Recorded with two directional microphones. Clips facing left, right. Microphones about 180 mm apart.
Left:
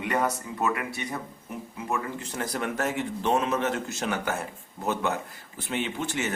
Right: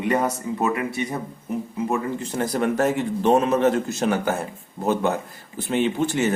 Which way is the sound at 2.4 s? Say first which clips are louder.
Right 8 dB; 35° right (ahead or behind).